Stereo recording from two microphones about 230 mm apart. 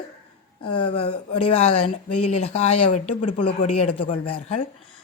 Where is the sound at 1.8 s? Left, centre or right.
Left.